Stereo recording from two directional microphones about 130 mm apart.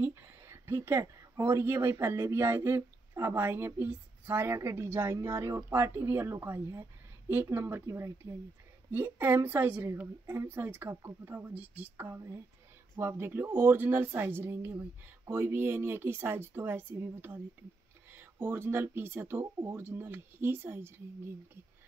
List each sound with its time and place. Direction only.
0.0 s a woman's voice: 20° right (ahead or behind)